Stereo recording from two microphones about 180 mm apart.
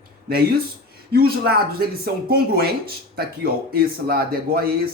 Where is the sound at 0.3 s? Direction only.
60° right (ahead or behind).